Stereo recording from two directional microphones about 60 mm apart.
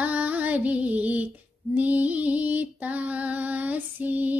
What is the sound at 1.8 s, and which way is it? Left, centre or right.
Music, right.